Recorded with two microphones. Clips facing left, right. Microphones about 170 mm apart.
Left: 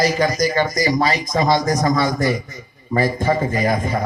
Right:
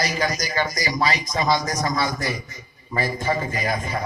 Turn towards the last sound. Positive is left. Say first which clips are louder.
# left 6 dB
turn(degrees=50)  # may be behind; listen again after turning